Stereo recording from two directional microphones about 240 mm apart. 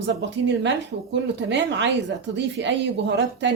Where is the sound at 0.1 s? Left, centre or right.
Right.